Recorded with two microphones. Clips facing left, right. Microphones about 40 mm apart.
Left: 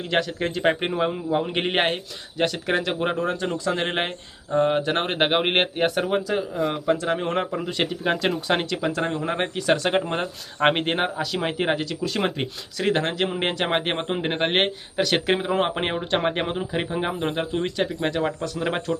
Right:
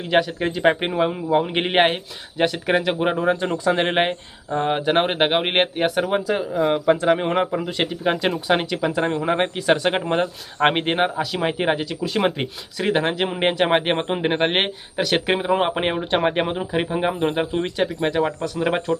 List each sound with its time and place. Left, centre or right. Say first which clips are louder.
0.1 s a man's voice: right 5 dB; centre
6.1 s a man's voice: right 3 dB; centre